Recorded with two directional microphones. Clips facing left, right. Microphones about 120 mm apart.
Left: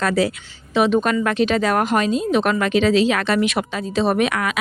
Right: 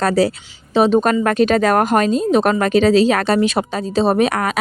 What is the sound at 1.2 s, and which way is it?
A woman's voice, 45° right (ahead or behind).